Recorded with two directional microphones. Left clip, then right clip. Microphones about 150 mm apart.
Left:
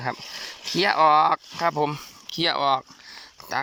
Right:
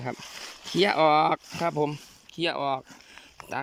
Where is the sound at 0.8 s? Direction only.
35° right (ahead or behind).